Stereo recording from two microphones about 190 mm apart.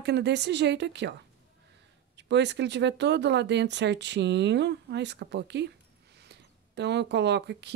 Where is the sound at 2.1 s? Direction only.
65° right (ahead or behind).